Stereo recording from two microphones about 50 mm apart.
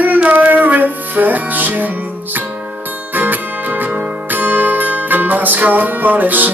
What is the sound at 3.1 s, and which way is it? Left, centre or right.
Music, right.